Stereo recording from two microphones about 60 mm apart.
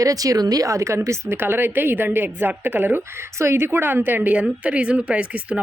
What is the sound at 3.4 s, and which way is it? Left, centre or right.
A woman's voice, right.